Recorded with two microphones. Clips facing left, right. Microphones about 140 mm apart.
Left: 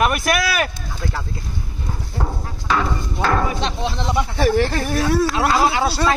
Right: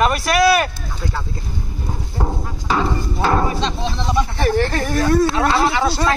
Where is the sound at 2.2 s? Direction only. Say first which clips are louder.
Right 3 dB; 20° right (ahead or behind).